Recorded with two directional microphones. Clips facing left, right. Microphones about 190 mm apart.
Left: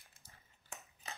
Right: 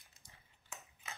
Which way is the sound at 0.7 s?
35° left (ahead or behind).